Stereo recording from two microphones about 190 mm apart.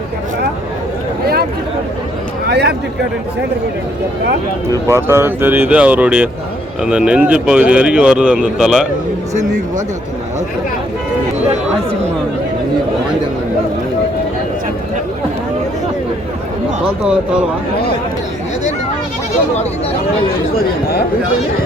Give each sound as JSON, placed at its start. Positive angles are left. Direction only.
{"t": 2.5, "sound": "speech", "side_deg": -60}
{"t": 4.9, "sound": "speech", "side_deg": -15}
{"t": 9.3, "sound": "speech", "side_deg": -40}